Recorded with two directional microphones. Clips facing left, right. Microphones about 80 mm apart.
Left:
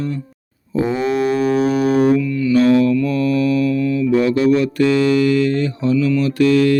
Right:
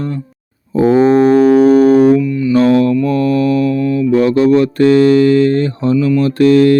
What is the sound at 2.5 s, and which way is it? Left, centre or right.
Mantra, right.